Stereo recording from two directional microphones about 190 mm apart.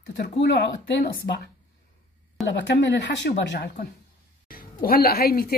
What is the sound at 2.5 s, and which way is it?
A woman's voice, 65° left (ahead or behind).